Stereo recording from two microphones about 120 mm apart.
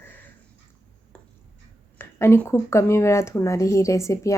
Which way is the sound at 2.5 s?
20° left (ahead or behind).